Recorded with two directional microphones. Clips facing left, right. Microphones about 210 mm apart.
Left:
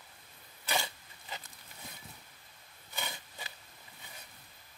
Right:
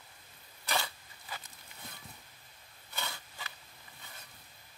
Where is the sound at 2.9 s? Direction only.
20° left (ahead or behind).